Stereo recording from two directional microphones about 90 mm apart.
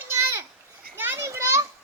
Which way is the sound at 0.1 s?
30° right (ahead or behind).